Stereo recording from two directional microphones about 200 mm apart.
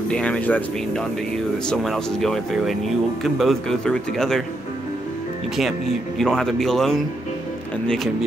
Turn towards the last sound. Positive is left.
turn(degrees=0)  # may be behind; listen again after turning